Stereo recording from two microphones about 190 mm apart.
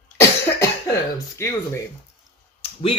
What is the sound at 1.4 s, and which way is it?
Speech, 15° left (ahead or behind).